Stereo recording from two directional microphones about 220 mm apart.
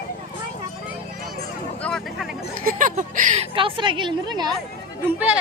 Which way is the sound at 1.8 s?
Centre (ahead or behind).